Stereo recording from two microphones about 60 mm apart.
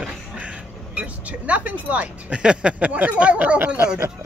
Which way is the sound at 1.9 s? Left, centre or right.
Right.